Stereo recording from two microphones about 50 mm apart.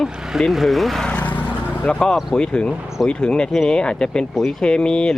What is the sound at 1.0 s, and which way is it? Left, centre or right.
Vehicle, left.